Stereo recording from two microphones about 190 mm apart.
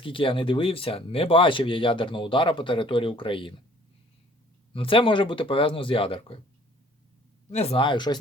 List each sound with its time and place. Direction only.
0.0 s speech: 25° left (ahead or behind)
4.7 s speech: 30° left (ahead or behind)
7.5 s speech: 30° left (ahead or behind)